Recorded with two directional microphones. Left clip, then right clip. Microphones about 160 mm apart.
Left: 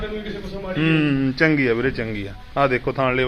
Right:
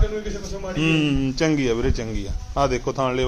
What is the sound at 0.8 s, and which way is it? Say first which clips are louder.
Speech: left 1 dB; 15° right (ahead or behind).